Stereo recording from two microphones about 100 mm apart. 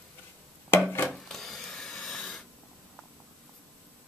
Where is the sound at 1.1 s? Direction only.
Centre (ahead or behind).